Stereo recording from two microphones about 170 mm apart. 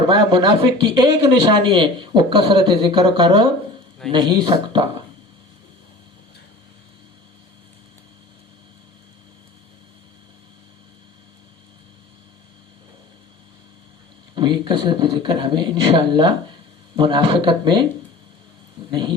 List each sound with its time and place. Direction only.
0.1 s speech: 25° right (ahead or behind)
14.3 s speech: 25° right (ahead or behind)
18.9 s speech: 30° right (ahead or behind)